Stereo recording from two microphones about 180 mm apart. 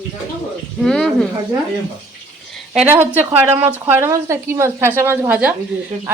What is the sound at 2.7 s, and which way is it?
A woman's voice, 10° right (ahead or behind).